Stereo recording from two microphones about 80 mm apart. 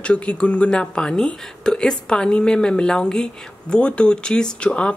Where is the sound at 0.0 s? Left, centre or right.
Centre.